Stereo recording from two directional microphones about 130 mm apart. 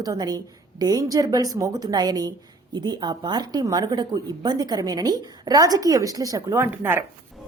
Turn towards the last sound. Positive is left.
turn(degrees=-20)  # may be behind; listen again after turning